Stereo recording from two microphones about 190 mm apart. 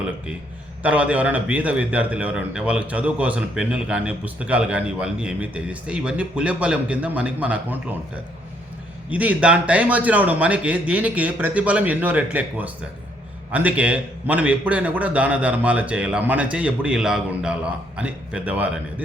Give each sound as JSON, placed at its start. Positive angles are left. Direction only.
{"t": 0.8, "sound": "a man's voice", "side_deg": -5}